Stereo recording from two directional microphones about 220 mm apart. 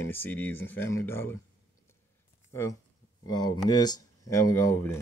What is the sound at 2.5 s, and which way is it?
Speech, 10° left (ahead or behind).